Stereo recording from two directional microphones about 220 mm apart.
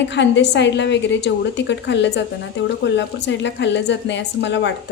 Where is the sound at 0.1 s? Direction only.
50° left (ahead or behind).